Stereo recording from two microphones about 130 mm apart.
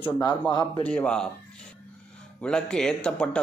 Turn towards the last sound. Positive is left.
turn(degrees=5)  # may be behind; listen again after turning